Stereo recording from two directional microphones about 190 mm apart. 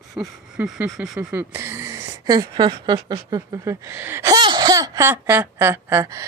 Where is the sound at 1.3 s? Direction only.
15° right (ahead or behind).